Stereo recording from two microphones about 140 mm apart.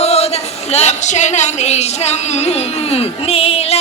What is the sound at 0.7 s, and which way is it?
A woman's voice, 50° left (ahead or behind).